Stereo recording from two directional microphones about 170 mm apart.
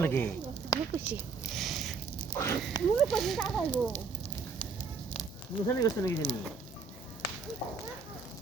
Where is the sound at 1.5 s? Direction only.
Centre (ahead or behind).